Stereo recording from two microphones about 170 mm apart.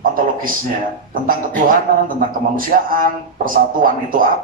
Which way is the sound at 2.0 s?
55° right (ahead or behind).